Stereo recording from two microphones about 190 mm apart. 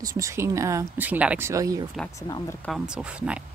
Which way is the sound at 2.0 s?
Centre (ahead or behind).